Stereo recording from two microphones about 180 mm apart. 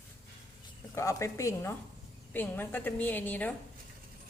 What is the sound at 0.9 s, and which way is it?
A woman's voice, 15° left (ahead or behind).